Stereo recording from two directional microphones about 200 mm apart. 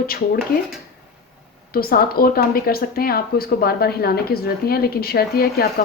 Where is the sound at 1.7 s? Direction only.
50° left (ahead or behind).